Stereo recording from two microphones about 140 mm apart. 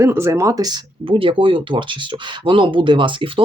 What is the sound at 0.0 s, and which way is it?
Speech, 20° right (ahead or behind).